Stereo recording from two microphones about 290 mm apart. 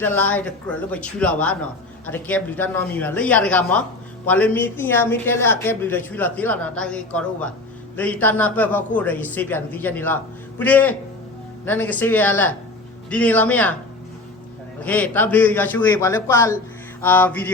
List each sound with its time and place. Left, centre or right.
0.0 s a woman's voice: centre
14.8 s a woman's voice: centre